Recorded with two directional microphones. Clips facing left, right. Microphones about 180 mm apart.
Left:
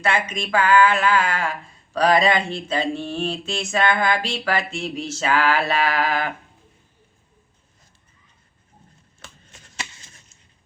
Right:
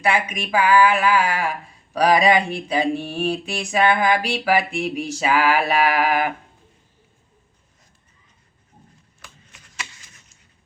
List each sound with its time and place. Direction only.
0.0 s speech: 10° right (ahead or behind)
9.2 s shuffling cards: 25° left (ahead or behind)